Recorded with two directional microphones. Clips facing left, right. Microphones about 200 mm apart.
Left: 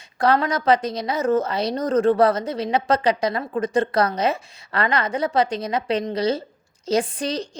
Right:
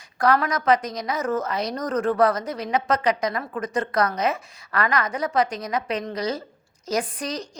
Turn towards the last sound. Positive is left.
turn(degrees=30)  # may be behind; listen again after turning